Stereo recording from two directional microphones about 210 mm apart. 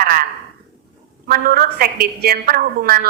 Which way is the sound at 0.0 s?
45° right (ahead or behind).